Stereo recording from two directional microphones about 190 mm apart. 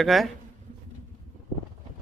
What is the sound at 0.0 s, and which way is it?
Speech, centre (ahead or behind).